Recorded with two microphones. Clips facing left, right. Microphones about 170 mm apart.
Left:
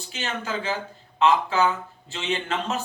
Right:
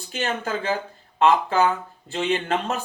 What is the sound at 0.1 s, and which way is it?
Speech, 50° right (ahead or behind).